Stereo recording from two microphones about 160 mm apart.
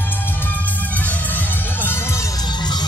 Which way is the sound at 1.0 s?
10° left (ahead or behind).